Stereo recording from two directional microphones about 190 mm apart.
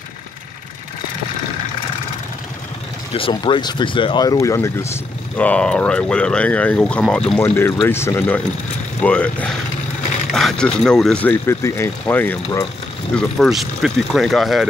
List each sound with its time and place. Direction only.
3.1 s speech: 30° left (ahead or behind); by 12.6 s 10° left (ahead or behind)
13.1 s speech: centre (ahead or behind)